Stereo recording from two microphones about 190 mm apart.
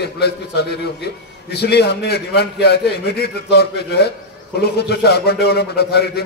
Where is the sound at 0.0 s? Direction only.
60° left (ahead or behind).